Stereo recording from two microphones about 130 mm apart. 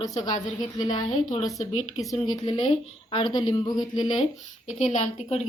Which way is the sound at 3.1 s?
35° left (ahead or behind).